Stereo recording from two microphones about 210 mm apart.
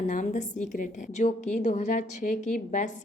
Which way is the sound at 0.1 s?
35° left (ahead or behind).